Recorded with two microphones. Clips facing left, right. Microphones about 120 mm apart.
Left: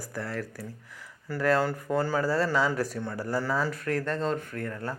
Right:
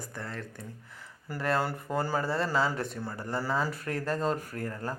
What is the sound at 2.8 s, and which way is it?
A man's voice, centre (ahead or behind).